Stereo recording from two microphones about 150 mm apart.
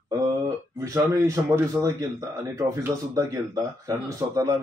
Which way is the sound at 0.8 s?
20° right (ahead or behind).